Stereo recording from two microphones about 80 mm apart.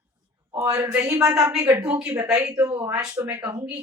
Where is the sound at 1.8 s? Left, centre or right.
Centre.